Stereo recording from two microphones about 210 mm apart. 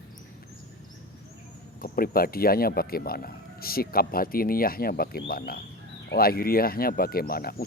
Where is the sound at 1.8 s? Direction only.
45° left (ahead or behind).